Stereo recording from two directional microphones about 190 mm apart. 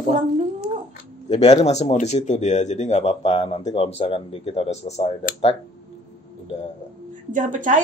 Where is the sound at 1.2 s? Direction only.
35° left (ahead or behind).